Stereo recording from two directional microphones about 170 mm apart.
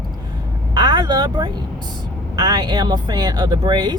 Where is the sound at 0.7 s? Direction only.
25° right (ahead or behind).